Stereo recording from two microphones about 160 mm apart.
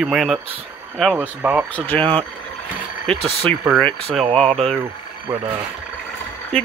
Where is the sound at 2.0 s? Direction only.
30° right (ahead or behind).